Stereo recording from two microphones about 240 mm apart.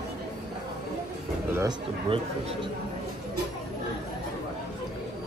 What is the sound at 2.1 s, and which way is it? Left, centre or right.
Speech, right.